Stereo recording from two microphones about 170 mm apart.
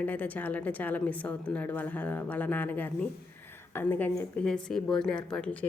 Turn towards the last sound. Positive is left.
turn(degrees=5)  # may be behind; listen again after turning